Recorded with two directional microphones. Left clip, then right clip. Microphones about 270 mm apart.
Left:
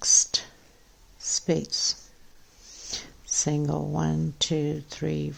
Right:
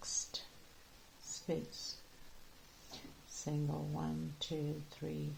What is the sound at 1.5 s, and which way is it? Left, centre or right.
Speech, left.